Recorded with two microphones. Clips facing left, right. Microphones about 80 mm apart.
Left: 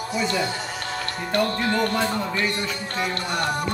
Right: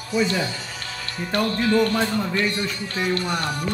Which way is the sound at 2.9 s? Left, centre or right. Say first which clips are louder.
Right 4 dB; left.